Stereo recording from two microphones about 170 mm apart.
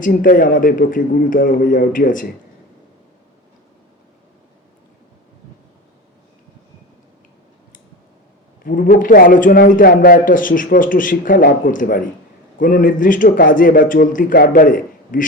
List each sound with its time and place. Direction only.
0.0 s a man's voice: 55° left (ahead or behind)
8.6 s a man's voice: 55° left (ahead or behind)